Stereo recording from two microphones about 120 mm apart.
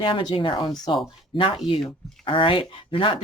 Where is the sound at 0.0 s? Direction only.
40° left (ahead or behind).